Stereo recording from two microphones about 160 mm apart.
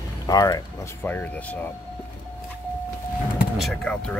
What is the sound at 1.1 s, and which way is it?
Speech, 10° left (ahead or behind).